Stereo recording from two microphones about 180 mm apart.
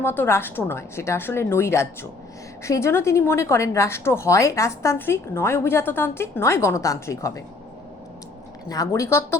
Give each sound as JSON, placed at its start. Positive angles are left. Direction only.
{"t": 0.0, "sound": "speech", "side_deg": 10}
{"t": 8.7, "sound": "speech", "side_deg": 20}